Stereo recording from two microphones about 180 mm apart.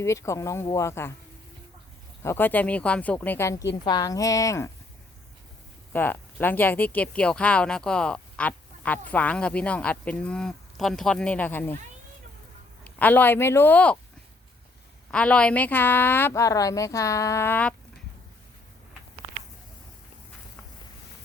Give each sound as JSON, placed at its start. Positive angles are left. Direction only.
{"t": 0.0, "sound": "speech", "side_deg": 15}
{"t": 2.2, "sound": "a woman's voice", "side_deg": 10}
{"t": 5.9, "sound": "speech", "side_deg": 10}
{"t": 12.8, "sound": "speech", "side_deg": 10}
{"t": 15.1, "sound": "speech", "side_deg": 5}